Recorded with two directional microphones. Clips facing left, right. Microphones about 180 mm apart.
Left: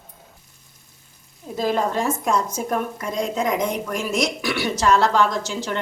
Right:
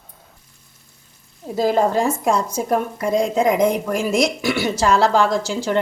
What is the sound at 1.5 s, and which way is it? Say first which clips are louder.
A woman's voice: right 5 dB; 30° right (ahead or behind).